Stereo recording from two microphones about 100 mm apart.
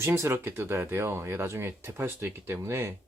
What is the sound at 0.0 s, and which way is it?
Speech, 25° right (ahead or behind).